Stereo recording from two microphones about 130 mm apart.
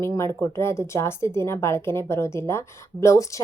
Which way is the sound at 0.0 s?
25° left (ahead or behind).